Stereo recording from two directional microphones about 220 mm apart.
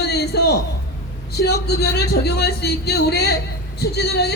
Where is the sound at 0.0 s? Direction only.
50° left (ahead or behind).